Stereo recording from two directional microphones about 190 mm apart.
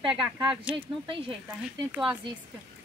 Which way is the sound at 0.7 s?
5° right (ahead or behind).